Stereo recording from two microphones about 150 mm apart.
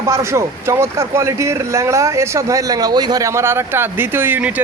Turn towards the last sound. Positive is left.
turn(degrees=-10)  # may be behind; listen again after turning